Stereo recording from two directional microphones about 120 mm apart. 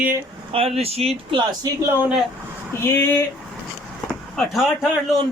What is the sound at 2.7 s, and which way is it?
Speech, 20° left (ahead or behind).